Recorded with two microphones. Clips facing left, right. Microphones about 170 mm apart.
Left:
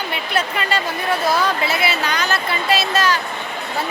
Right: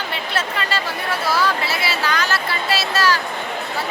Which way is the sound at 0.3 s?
15° left (ahead or behind).